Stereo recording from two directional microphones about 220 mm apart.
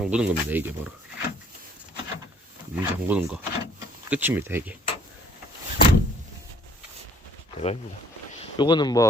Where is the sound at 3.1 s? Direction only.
5° right (ahead or behind).